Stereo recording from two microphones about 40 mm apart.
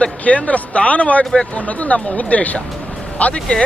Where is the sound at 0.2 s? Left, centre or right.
Left.